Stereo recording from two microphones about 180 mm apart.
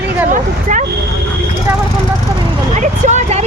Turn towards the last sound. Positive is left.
turn(degrees=-40)  # may be behind; listen again after turning